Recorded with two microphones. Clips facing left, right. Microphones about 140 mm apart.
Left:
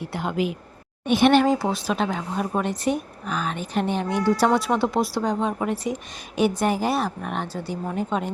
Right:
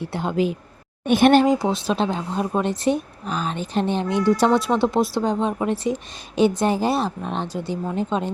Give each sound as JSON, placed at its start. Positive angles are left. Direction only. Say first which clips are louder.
{"t": 0.0, "sound": "speech", "louder": "right 3 dB", "side_deg": -25}
{"t": 1.0, "sound": "speech", "louder": "right 2 dB", "side_deg": -50}
{"t": 1.5, "sound": "speech", "louder": "right 2 dB", "side_deg": -20}